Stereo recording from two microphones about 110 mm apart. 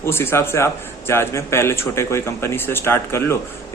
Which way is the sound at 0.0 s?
25° left (ahead or behind).